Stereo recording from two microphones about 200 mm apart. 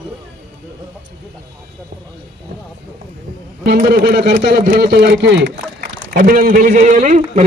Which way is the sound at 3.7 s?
45° right (ahead or behind).